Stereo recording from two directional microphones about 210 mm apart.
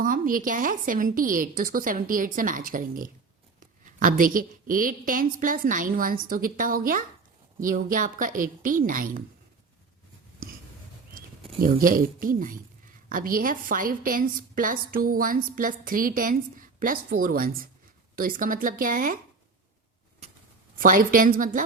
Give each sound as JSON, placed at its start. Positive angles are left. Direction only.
{"t": 0.0, "sound": "a woman's voice", "side_deg": -40}
{"t": 11.6, "sound": "a woman's voice", "side_deg": -40}
{"t": 20.2, "sound": "a sound", "side_deg": -30}
{"t": 20.7, "sound": "a woman's voice", "side_deg": -40}